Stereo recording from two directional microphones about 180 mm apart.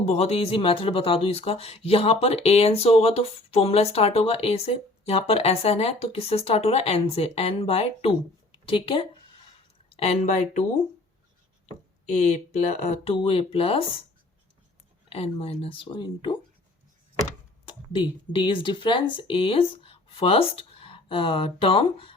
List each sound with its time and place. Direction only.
0.0 s speech: 35° left (ahead or behind)
12.0 s speech: 40° left (ahead or behind)
15.1 s speech: 30° left (ahead or behind)
17.7 s speech: 30° left (ahead or behind)